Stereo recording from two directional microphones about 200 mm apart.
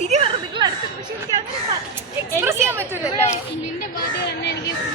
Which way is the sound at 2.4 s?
10° right (ahead or behind).